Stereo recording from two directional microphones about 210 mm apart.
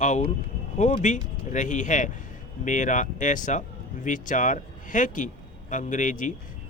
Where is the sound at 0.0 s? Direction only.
35° left (ahead or behind).